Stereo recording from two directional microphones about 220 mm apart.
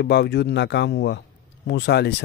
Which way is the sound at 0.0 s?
50° left (ahead or behind).